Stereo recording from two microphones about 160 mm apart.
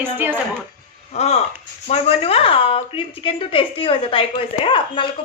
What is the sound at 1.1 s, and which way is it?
A woman's voice, 40° left (ahead or behind).